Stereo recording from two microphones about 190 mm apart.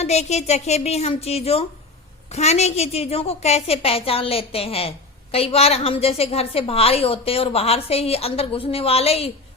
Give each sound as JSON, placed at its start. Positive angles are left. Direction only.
{"t": 0.0, "sound": "a woman's voice", "side_deg": 35}